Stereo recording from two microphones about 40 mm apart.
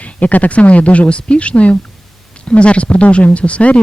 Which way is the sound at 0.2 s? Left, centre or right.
Left.